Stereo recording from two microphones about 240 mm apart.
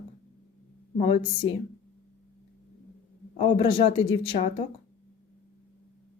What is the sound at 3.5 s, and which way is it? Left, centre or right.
Speech, left.